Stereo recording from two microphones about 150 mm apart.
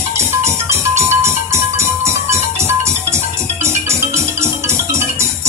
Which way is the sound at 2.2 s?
20° right (ahead or behind).